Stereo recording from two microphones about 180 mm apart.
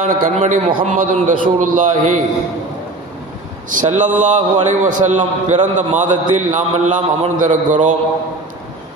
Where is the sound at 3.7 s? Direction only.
45° right (ahead or behind).